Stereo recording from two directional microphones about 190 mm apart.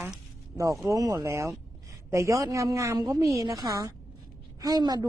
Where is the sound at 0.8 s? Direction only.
20° right (ahead or behind).